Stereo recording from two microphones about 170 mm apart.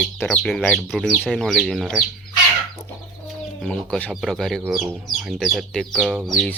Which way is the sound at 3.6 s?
5° left (ahead or behind).